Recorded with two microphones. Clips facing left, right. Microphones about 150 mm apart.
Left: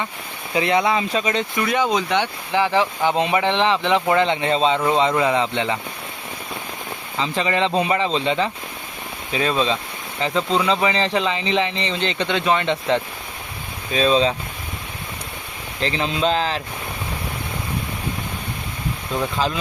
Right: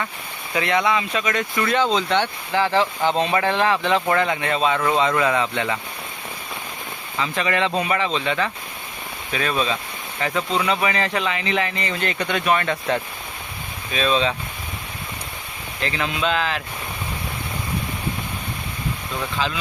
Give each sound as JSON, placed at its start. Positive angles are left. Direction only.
{"t": 0.5, "sound": "speech", "side_deg": 30}
{"t": 1.6, "sound": "speech", "side_deg": 15}
{"t": 7.2, "sound": "speech", "side_deg": 25}
{"t": 13.9, "sound": "speech", "side_deg": 35}
{"t": 15.8, "sound": "speech", "side_deg": 30}